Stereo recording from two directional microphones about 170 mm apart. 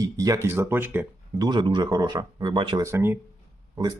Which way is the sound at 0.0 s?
20° right (ahead or behind).